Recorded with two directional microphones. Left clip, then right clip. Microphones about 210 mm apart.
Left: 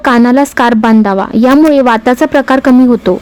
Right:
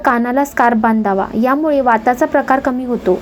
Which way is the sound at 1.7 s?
45° left (ahead or behind).